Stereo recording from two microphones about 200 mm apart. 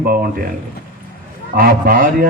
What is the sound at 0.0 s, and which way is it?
Speech, 45° right (ahead or behind).